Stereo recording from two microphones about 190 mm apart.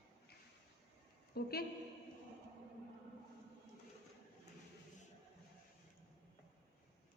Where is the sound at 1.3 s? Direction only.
55° left (ahead or behind).